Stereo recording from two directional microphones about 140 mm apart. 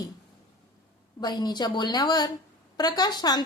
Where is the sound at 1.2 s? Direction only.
30° left (ahead or behind).